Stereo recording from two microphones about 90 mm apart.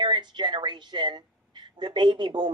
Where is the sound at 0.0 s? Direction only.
60° right (ahead or behind).